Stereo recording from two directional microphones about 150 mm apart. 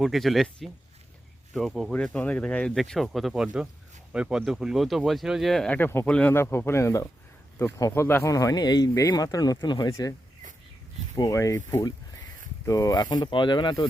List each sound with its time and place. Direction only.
0.0 s speech: centre (ahead or behind); by 10.2 s 25° left (ahead or behind)
11.2 s speech: 20° left (ahead or behind)